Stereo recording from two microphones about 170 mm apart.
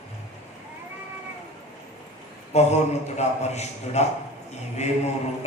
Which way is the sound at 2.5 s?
40° left (ahead or behind).